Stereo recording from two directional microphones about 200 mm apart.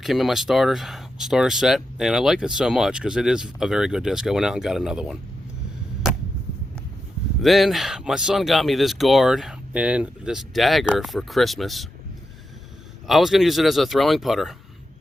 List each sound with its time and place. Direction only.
0.0 s speech: centre (ahead or behind)
7.4 s speech: centre (ahead or behind)
13.1 s speech: centre (ahead or behind)